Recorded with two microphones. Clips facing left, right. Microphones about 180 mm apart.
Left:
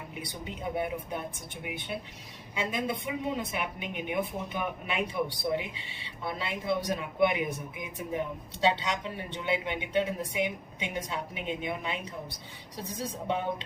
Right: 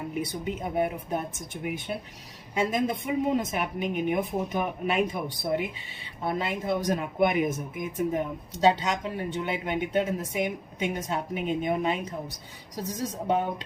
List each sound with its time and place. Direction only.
0.2 s a woman's voice: 45° right (ahead or behind)